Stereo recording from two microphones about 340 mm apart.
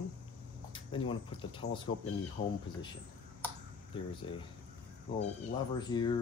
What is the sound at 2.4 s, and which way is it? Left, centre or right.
Speech, left.